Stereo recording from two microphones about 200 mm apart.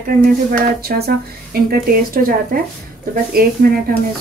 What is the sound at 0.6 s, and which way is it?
A woman's voice, 50° right (ahead or behind).